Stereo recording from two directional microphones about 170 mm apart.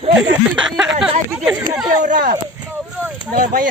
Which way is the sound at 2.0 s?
50° right (ahead or behind).